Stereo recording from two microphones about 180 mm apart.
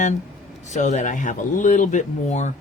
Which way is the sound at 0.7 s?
40° left (ahead or behind).